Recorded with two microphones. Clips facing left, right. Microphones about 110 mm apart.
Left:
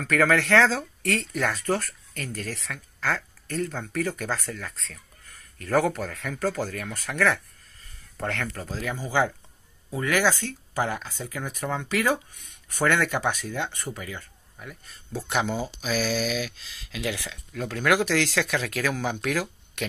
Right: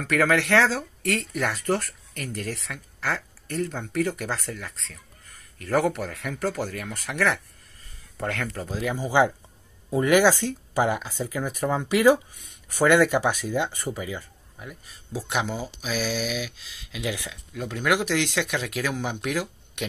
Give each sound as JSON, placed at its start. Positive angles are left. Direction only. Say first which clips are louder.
{"t": 0.0, "sound": "speech", "louder": "even", "side_deg": -20}
{"t": 0.7, "sound": "speech", "louder": "even", "side_deg": -5}
{"t": 8.6, "sound": "speech", "louder": "right 4 dB", "side_deg": -15}